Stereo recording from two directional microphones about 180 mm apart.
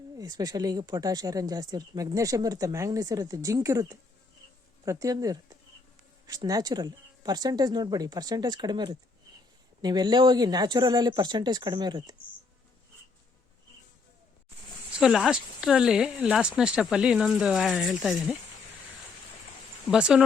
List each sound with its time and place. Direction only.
0.2 s speech: 20° right (ahead or behind)
14.9 s speech: centre (ahead or behind)
19.9 s speech: 5° right (ahead or behind)